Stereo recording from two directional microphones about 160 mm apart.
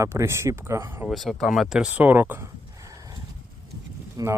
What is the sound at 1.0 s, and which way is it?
Speech, centre (ahead or behind).